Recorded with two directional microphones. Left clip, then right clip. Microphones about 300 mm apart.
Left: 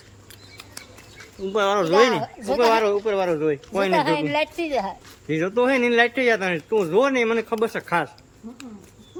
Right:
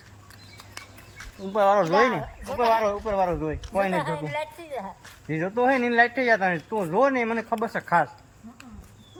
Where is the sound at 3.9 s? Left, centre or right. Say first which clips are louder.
Left 7 dB; left.